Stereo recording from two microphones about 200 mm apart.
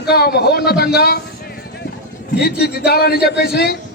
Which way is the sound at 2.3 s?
50° left (ahead or behind).